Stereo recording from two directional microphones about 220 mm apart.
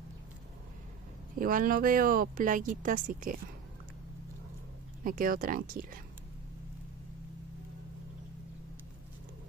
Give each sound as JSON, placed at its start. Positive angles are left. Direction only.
{"t": 1.4, "sound": "speech", "side_deg": -40}
{"t": 5.0, "sound": "speech", "side_deg": -40}